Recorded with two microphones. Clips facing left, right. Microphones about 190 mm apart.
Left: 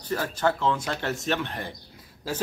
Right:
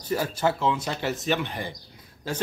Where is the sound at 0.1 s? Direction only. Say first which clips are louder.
Right 1 dB; 10° right (ahead or behind).